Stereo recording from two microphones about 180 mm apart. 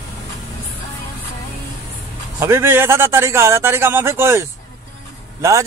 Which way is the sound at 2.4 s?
15° right (ahead or behind).